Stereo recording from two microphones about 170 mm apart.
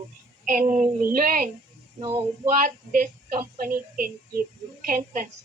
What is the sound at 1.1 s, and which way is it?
Speech, 55° right (ahead or behind).